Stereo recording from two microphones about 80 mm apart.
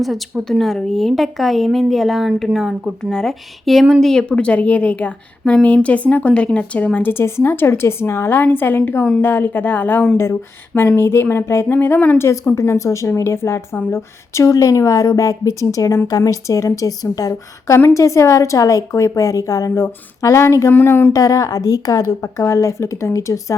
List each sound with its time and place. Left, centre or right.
0.0 s a woman's voice: centre
3.0 s a woman's voice: centre
12.1 s a woman's voice: left
20.7 s speech: left
21.1 s a woman's voice: left